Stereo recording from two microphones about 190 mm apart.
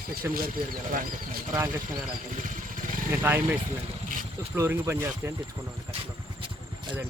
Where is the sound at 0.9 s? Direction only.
50° right (ahead or behind).